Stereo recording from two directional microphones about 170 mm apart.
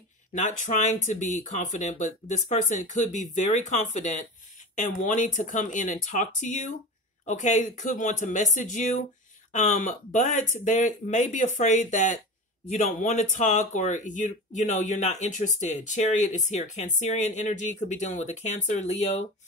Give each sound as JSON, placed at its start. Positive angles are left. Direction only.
{"t": 0.3, "sound": "speech", "side_deg": 45}